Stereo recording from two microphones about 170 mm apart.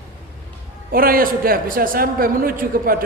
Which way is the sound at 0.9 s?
60° right (ahead or behind).